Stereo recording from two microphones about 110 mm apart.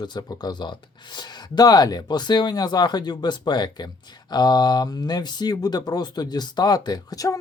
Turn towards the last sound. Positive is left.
turn(degrees=35)  # may be behind; listen again after turning